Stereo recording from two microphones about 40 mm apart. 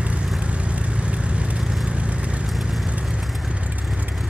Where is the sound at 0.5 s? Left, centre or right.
Right.